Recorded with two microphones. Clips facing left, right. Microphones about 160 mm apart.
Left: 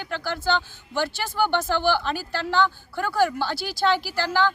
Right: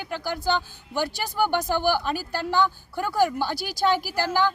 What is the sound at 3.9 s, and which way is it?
Speech, 45° right (ahead or behind).